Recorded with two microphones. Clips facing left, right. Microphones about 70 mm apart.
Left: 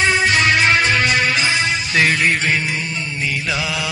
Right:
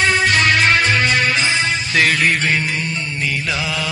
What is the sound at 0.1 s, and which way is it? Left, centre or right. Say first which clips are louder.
Music: even; right.